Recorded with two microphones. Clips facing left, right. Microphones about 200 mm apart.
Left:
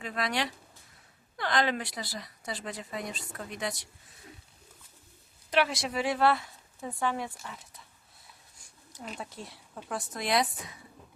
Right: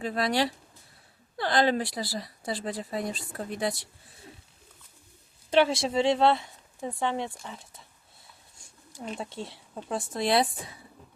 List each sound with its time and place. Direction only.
0.0 s a woman's voice: 35° right (ahead or behind)
5.5 s speech: 25° right (ahead or behind)
9.0 s speech: 30° right (ahead or behind)